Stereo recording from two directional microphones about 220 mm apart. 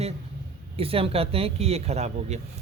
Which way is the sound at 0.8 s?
25° right (ahead or behind).